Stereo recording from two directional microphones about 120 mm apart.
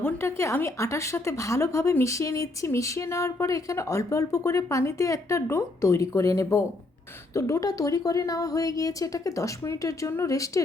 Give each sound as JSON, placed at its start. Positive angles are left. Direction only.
{"t": 0.0, "sound": "a woman's voice", "side_deg": 20}